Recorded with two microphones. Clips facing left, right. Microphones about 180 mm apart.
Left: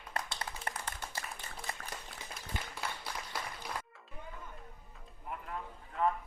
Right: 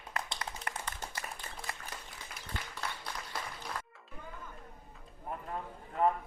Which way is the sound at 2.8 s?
5° left (ahead or behind).